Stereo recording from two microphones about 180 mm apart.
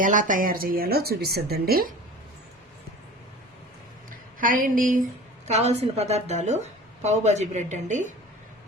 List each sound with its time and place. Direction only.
0.0 s speech: 45° right (ahead or behind)
4.1 s speech: 50° right (ahead or behind)
5.5 s a woman's voice: 40° right (ahead or behind)